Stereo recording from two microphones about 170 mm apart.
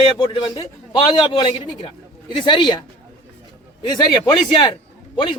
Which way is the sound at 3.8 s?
20° left (ahead or behind).